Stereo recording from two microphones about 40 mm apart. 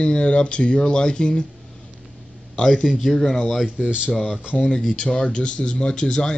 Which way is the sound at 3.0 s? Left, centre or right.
Centre.